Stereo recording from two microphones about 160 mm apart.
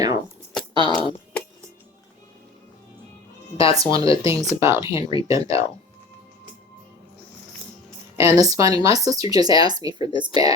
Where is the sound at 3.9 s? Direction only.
35° left (ahead or behind).